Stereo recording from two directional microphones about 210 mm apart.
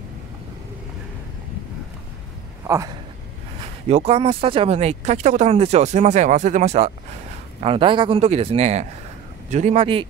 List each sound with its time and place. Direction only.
2.6 s speech: 15° right (ahead or behind)
3.9 s a man's voice: 30° right (ahead or behind)